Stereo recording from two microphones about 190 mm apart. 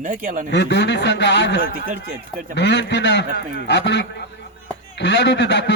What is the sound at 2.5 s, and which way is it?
A man's voice, 65° left (ahead or behind).